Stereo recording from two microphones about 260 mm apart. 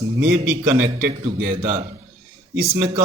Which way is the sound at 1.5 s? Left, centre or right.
Right.